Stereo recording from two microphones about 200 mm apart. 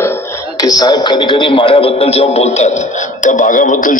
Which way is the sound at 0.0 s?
15° left (ahead or behind).